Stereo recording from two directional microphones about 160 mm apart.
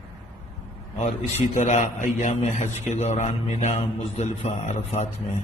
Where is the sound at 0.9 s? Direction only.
45° left (ahead or behind).